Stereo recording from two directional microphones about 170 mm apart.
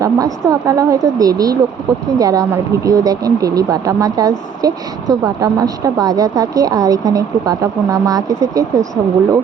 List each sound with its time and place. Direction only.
0.0 s speech: 20° right (ahead or behind)